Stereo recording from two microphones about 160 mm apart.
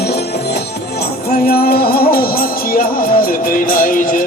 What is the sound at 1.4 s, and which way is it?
Music, 70° left (ahead or behind).